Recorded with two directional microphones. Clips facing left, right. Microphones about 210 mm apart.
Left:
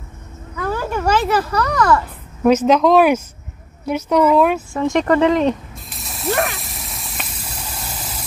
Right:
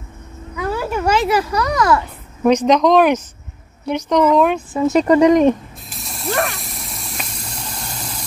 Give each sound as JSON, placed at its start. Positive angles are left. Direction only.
{"t": 0.6, "sound": "a child's voice", "side_deg": -10}
{"t": 2.4, "sound": "speech", "side_deg": 5}
{"t": 5.0, "sound": "speech", "side_deg": -15}
{"t": 5.9, "sound": "spray", "side_deg": 0}
{"t": 6.4, "sound": "a sound", "side_deg": 0}